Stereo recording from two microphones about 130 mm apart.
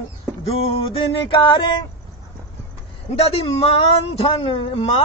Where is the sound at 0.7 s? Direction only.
45° left (ahead or behind).